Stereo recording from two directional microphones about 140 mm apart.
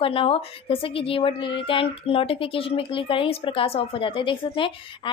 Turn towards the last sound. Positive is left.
turn(degrees=40)  # may be behind; listen again after turning